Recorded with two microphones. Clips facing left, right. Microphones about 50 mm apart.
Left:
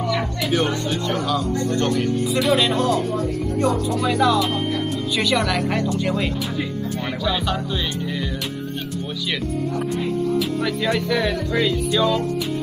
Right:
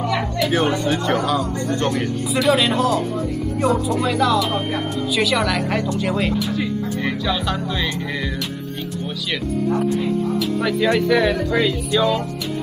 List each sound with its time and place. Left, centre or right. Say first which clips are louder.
1.0 s speech: right 3 dB; right
2.3 s a woman's voice: right 3 dB; centre
10.6 s speech: right 4 dB; centre